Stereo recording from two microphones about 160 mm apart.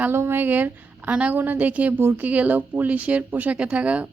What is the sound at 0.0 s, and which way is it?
A woman's voice, 15° right (ahead or behind).